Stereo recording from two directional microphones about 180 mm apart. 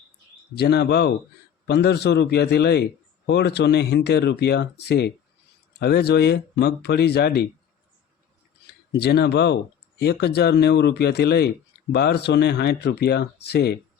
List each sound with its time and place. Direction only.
0.5 s a man's voice: 65° left (ahead or behind)
8.9 s a man's voice: 65° left (ahead or behind)